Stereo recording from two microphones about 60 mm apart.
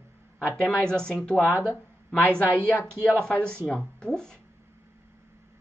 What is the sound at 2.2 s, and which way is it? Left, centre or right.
Speech, right.